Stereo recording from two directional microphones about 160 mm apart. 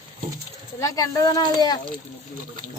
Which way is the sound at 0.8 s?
20° left (ahead or behind).